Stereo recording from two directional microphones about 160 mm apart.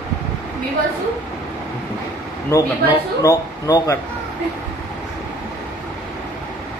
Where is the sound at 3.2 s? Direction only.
20° left (ahead or behind).